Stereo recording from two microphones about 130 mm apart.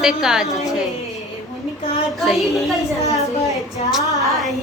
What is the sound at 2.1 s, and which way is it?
Speech, centre (ahead or behind).